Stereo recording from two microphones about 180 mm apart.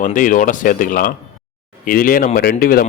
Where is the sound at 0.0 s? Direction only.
45° left (ahead or behind).